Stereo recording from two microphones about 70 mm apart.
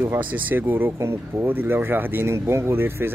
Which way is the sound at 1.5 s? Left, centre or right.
Right.